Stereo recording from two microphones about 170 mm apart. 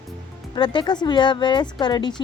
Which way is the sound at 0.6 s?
25° left (ahead or behind).